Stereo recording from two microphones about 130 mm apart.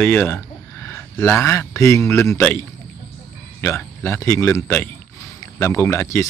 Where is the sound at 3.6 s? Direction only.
20° left (ahead or behind).